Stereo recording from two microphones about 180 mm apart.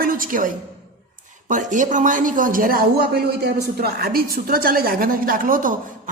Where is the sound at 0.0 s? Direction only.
50° right (ahead or behind).